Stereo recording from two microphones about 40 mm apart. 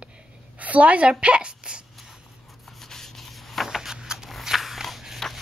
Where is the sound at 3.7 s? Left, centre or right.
Centre.